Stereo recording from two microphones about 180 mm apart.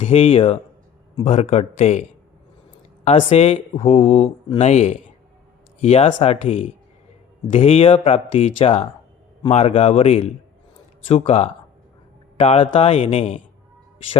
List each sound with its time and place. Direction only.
0.0 s speech: 35° left (ahead or behind)